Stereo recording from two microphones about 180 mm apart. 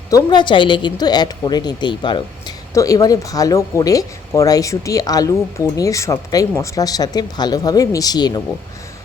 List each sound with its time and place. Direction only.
0.1 s speech: 25° left (ahead or behind)